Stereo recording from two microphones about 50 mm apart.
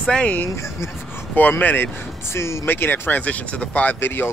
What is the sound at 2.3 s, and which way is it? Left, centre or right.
Speech, left.